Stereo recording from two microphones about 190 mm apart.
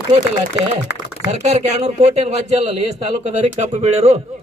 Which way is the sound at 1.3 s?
35° right (ahead or behind).